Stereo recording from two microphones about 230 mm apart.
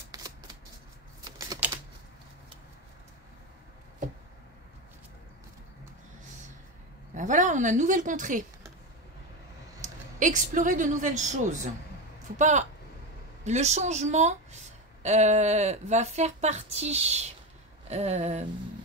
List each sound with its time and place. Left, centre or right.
0.1 s shuffling cards: centre
1.4 s typing: centre
7.2 s a woman's voice: right
10.1 s a woman's voice: right